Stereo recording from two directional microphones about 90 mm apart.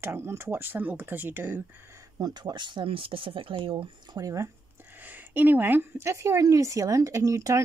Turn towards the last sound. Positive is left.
turn(degrees=-35)  # may be behind; listen again after turning